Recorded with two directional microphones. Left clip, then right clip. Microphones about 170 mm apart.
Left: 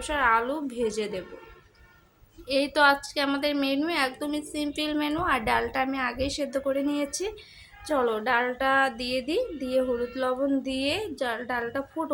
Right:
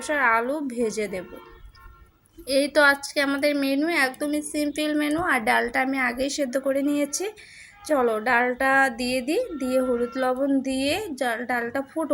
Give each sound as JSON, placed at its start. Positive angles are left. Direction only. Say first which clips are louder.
{"t": 0.0, "sound": "a woman's voice", "louder": "right 2 dB", "side_deg": -20}
{"t": 2.5, "sound": "a woman's voice", "louder": "right 3 dB", "side_deg": -20}